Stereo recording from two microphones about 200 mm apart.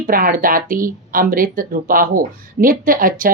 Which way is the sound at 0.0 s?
45° right (ahead or behind).